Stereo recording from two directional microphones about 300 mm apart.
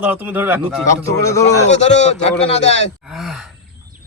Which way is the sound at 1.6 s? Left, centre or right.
Left.